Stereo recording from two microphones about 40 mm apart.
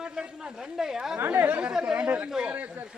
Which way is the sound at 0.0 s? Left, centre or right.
Centre.